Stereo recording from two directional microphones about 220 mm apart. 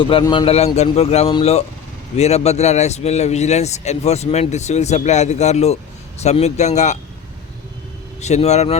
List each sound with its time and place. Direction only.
0.0 s a man's voice: 25° left (ahead or behind)
8.2 s speech: 30° left (ahead or behind)